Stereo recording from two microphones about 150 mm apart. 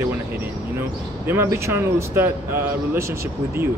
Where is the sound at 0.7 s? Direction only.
15° right (ahead or behind).